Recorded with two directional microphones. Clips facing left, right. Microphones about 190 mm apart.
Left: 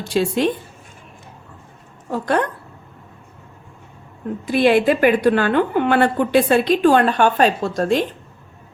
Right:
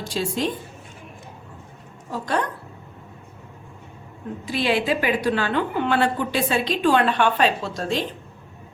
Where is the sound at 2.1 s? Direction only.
55° left (ahead or behind).